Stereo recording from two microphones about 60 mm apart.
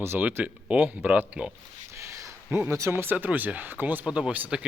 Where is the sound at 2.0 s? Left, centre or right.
Right.